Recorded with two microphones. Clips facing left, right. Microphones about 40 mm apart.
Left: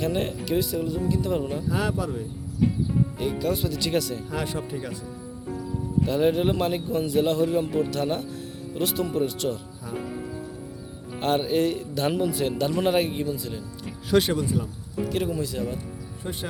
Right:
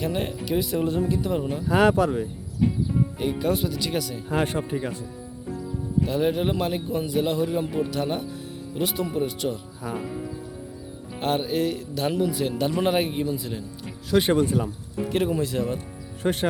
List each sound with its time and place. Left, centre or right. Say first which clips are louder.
0.0 s speech: left 1 dB; centre
1.6 s speech: right 7 dB; right
3.2 s speech: right 2 dB; centre
3.6 s speech: left 1 dB; centre
4.3 s speech: right 5 dB; right
6.0 s speech: left 1 dB; centre
11.2 s speech: left 1 dB; centre
14.3 s speech: right 4 dB; right
15.1 s speech: right 4 dB; right
15.4 s speech: right 3 dB; right
16.2 s speech: right 9 dB; right